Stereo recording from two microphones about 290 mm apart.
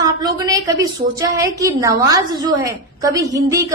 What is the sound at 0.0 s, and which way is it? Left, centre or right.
A woman's voice, centre.